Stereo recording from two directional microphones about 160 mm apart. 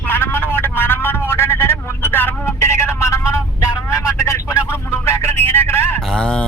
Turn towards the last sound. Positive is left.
turn(degrees=5)  # may be behind; listen again after turning